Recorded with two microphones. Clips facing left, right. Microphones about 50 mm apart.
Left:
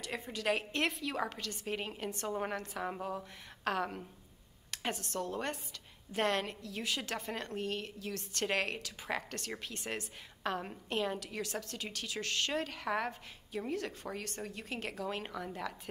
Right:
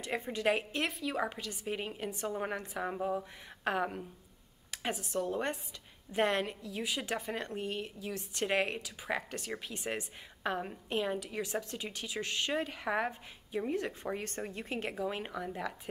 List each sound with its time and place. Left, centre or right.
0.0 s speech: right
0.7 s speech: centre
2.5 s speech: right
2.8 s a woman's voice: centre